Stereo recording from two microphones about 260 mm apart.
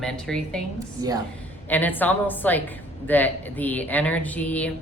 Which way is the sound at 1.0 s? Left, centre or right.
Centre.